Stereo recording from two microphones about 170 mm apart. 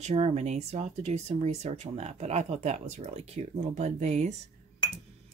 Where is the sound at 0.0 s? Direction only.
40° right (ahead or behind).